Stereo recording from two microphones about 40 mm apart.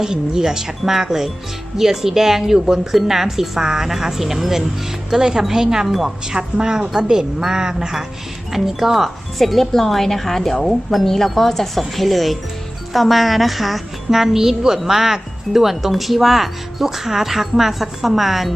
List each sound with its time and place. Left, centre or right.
0.0 s speech: centre
6.3 s speech: centre